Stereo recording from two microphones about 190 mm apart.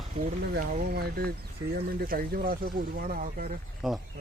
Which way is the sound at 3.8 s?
Centre (ahead or behind).